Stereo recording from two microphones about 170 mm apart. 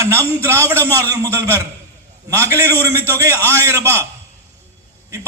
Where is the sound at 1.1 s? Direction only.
15° right (ahead or behind).